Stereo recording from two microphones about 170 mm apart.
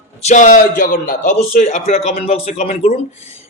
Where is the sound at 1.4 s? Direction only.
40° left (ahead or behind).